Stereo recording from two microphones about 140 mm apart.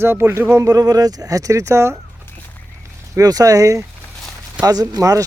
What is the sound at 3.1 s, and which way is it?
Speech, 25° right (ahead or behind).